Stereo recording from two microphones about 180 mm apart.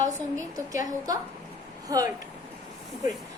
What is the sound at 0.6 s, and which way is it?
A woman's voice, 20° right (ahead or behind).